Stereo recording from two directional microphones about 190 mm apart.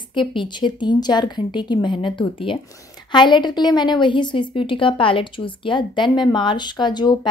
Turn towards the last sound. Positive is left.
turn(degrees=25)  # may be behind; listen again after turning